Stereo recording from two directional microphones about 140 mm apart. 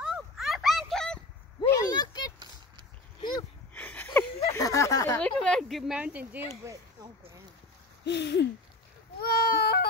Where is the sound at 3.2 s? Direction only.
30° left (ahead or behind).